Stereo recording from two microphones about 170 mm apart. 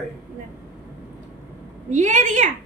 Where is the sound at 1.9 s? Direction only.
45° right (ahead or behind).